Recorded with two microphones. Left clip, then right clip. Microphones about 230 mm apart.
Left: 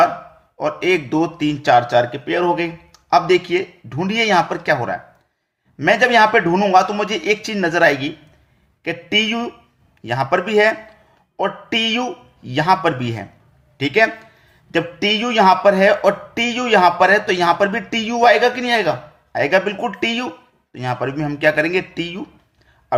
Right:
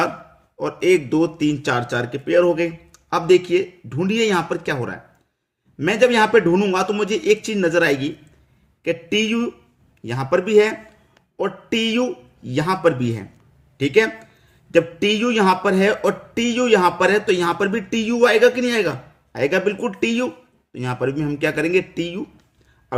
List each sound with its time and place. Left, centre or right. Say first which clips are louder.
0.6 s speech: even; centre